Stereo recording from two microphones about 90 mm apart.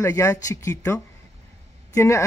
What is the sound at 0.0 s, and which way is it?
Speech, 35° left (ahead or behind).